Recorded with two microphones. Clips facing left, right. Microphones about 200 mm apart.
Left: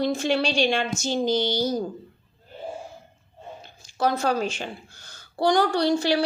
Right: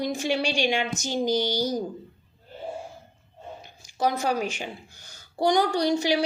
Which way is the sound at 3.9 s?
15° right (ahead or behind).